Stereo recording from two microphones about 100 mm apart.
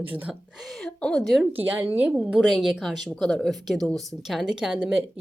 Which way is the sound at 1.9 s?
15° right (ahead or behind).